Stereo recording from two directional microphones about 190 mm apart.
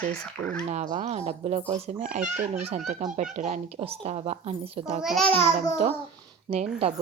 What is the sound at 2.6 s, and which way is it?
Speech, 40° right (ahead or behind).